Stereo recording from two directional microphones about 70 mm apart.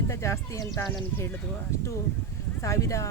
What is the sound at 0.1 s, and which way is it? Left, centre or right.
Speech, left.